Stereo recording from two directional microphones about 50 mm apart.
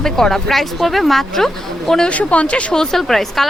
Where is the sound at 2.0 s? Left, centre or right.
Left; by 3.5 s centre.